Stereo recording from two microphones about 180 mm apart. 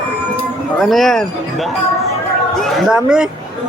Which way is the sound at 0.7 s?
Centre (ahead or behind).